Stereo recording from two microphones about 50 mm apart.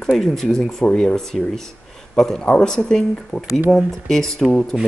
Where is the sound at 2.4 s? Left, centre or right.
Centre.